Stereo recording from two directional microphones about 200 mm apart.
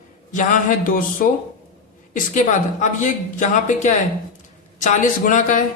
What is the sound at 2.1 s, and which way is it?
Speech, 40° left (ahead or behind).